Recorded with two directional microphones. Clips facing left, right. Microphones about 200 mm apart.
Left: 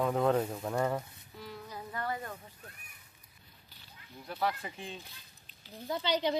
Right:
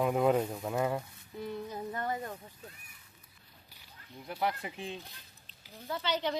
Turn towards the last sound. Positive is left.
turn(degrees=15)  # may be behind; listen again after turning